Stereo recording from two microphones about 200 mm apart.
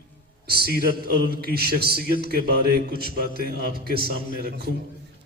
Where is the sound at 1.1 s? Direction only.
45° left (ahead or behind).